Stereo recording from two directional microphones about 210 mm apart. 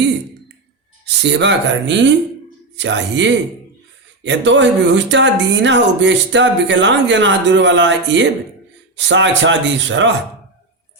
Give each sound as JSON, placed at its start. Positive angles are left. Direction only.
{"t": 1.0, "sound": "speech", "side_deg": -55}